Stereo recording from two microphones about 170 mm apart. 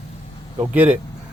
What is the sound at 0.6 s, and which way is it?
Speech, 10° right (ahead or behind).